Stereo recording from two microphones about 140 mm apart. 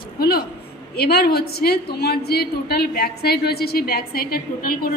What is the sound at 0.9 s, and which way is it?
A woman's voice, 90° left.